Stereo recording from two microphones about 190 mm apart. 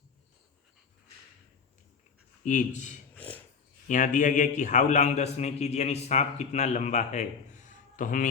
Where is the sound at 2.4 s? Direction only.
40° left (ahead or behind).